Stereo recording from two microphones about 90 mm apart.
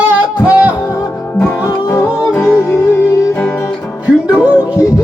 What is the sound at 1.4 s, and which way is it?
Music, 30° left (ahead or behind).